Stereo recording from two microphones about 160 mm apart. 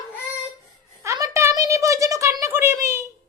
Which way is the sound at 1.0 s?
20° right (ahead or behind).